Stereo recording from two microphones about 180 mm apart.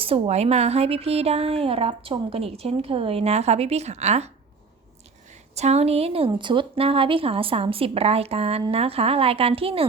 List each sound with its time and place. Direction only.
0.0 s speech: 35° right (ahead or behind)
5.5 s speech: 35° right (ahead or behind)